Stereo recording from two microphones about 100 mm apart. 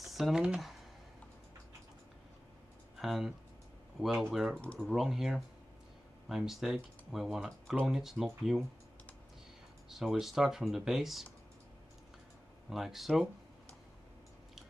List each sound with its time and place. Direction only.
0.0 s speech: 5° right (ahead or behind)
3.0 s speech: 5° right (ahead or behind)
9.8 s speech: 5° right (ahead or behind)
12.6 s speech: 5° right (ahead or behind)